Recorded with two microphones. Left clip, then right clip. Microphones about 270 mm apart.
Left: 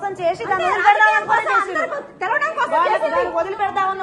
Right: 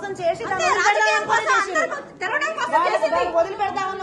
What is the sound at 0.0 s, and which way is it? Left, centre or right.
Speech, left.